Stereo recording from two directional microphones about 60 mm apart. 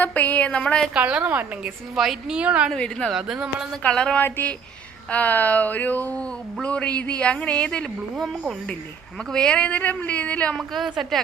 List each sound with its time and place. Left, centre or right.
0.0 s speech: left
0.5 s a woman's voice: centre
0.9 s a woman's voice: right
2.0 s a woman's voice: centre
2.3 s a woman's voice: centre
2.7 s a woman's voice: centre
3.1 s speech: centre
3.8 s a woman's voice: centre
4.2 s speech: left
8.2 s a woman's voice: centre
9.3 s speech: centre
10.6 s a woman's voice: centre